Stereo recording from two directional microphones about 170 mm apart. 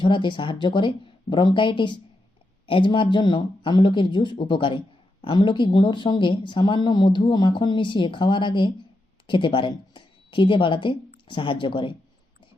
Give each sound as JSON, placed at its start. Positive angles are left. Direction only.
{"t": 0.0, "sound": "a woman's voice", "side_deg": 30}